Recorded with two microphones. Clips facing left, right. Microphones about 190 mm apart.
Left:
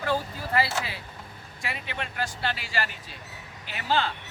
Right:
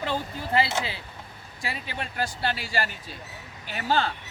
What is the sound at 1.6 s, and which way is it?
Speech, 35° right (ahead or behind).